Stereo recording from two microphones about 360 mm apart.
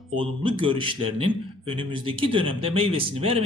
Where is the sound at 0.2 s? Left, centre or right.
Centre.